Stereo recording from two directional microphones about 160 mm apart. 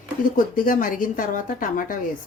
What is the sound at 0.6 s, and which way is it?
Speech, 60° left (ahead or behind).